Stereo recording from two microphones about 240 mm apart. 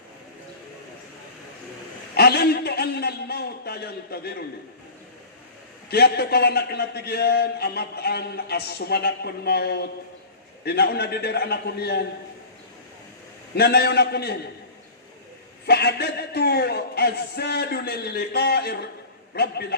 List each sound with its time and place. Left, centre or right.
2.1 s a man's voice: left
5.9 s a man's voice: left
13.6 s a man's voice: left
15.6 s a man's voice: left